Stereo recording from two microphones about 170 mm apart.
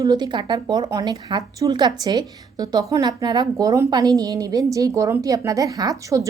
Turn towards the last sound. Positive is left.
turn(degrees=-20)  # may be behind; listen again after turning